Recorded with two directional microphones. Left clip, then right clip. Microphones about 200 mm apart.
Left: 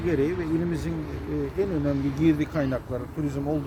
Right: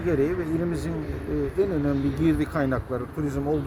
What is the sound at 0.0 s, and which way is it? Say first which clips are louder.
Speech: right 1 dB; 5° right (ahead or behind).